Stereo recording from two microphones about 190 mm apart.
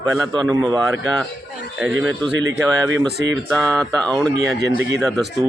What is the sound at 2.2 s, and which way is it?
Speech, 65° right (ahead or behind).